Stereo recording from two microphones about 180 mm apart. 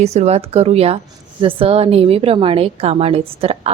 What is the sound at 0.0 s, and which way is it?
A woman's voice, 35° right (ahead or behind).